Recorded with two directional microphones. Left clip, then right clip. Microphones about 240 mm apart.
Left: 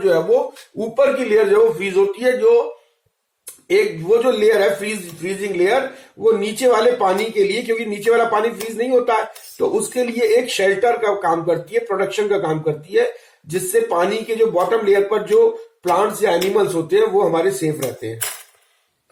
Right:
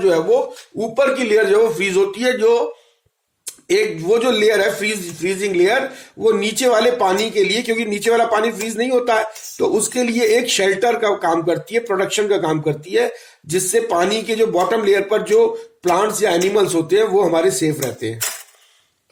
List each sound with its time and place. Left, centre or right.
0.9 s speech: right